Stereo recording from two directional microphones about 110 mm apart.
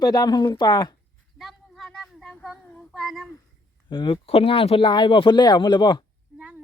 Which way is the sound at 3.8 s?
45° left (ahead or behind).